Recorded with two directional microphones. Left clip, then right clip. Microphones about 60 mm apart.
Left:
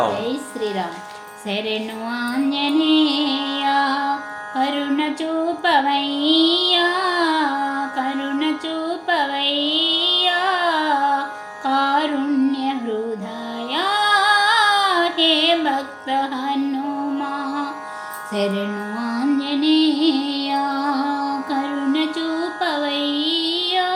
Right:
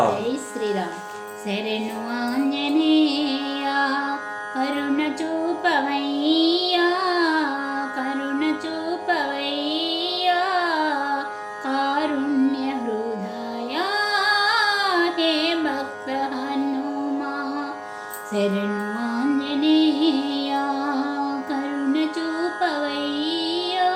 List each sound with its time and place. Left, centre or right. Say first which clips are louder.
1.5 s music: left 3 dB; left
4.1 s music: left 3 dB; left
5.6 s child singing: left 5 dB; left
9.0 s music: left 5 dB; left
13.7 s female singing: left 5 dB; left
18.3 s music: left 1 dB; left